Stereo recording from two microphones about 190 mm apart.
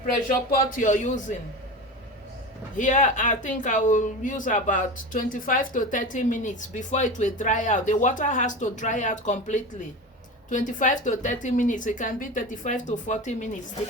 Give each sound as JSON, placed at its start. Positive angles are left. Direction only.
{"t": 0.3, "sound": "speech", "side_deg": 45}
{"t": 2.7, "sound": "speech", "side_deg": 40}